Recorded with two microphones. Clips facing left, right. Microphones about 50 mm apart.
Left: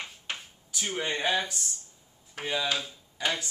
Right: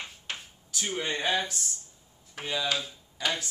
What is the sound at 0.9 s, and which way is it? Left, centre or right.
Speech, centre.